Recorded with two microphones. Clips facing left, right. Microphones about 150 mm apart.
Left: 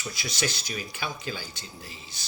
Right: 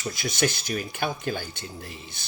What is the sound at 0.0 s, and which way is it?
Speech, 50° right (ahead or behind).